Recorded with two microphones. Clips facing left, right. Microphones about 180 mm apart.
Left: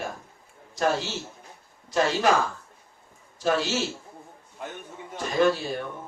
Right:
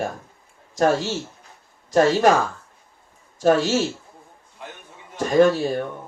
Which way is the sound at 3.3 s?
45° right (ahead or behind).